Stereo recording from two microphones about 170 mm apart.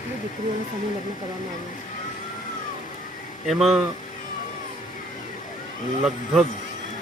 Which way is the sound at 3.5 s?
Centre (ahead or behind).